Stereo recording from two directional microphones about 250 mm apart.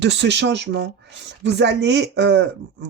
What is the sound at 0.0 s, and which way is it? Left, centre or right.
Speech, right.